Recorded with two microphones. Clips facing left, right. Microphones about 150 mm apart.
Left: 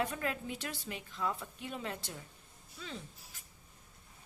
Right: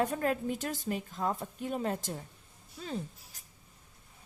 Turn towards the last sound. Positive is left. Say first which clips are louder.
# right 9 dB
turn(degrees=-40)  # may be behind; listen again after turning